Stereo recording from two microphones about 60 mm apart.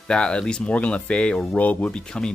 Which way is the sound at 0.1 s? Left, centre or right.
Centre.